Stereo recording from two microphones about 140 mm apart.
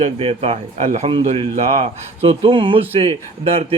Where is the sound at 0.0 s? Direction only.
45° right (ahead or behind).